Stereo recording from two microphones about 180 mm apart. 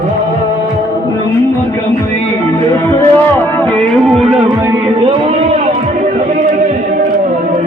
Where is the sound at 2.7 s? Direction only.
15° left (ahead or behind).